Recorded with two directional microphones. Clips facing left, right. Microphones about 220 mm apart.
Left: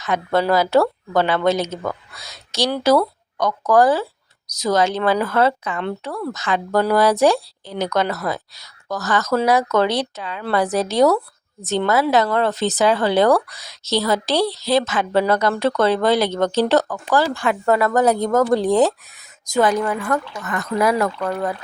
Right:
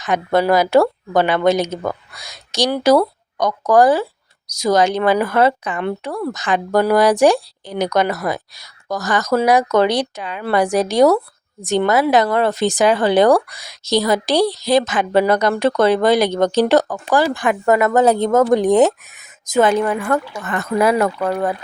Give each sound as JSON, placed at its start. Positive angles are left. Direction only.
{"t": 0.0, "sound": "speech", "side_deg": -15}